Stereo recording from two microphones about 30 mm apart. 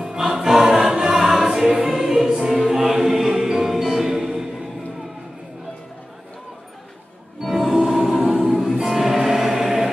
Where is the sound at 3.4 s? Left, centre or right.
Centre.